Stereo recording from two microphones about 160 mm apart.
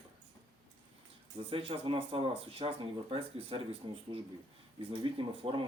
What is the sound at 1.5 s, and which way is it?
Speech, 35° right (ahead or behind).